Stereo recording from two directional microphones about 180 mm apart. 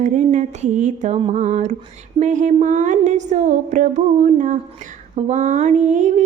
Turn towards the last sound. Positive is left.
turn(degrees=-40)  # may be behind; listen again after turning